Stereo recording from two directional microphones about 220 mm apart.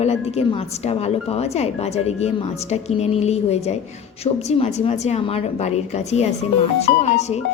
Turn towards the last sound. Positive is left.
turn(degrees=30)  # may be behind; listen again after turning